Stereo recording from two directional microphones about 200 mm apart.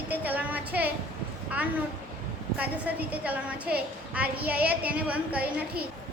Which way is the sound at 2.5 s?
5° right (ahead or behind).